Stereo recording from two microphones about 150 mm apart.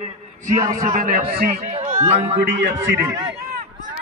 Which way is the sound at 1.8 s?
50° right (ahead or behind).